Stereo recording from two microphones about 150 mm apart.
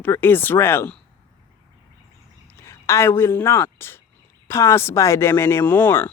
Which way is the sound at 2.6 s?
20° left (ahead or behind).